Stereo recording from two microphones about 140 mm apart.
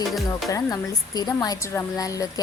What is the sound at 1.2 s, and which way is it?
Music, 25° left (ahead or behind).